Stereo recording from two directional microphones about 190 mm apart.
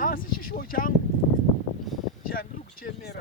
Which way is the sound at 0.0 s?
50° left (ahead or behind).